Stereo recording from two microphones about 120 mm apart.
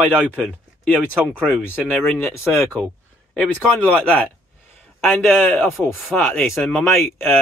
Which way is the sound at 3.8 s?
10° left (ahead or behind).